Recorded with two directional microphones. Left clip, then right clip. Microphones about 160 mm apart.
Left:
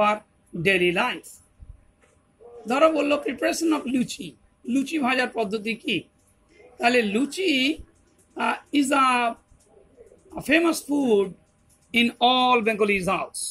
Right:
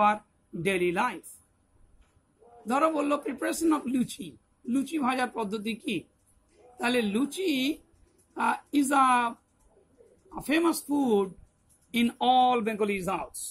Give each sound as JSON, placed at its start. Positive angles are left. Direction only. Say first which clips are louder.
{"t": 0.0, "sound": "speech", "louder": "left 2 dB", "side_deg": -20}
{"t": 2.7, "sound": "a man's voice", "louder": "left 6 dB", "side_deg": -20}
{"t": 10.3, "sound": "a man's voice", "louder": "left 5 dB", "side_deg": -20}
{"t": 12.2, "sound": "speech", "louder": "left 2 dB", "side_deg": -5}